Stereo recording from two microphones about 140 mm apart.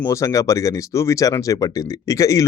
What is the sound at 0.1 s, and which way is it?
Speech, 25° left (ahead or behind).